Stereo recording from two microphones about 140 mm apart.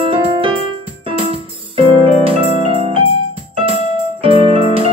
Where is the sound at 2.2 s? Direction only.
40° right (ahead or behind).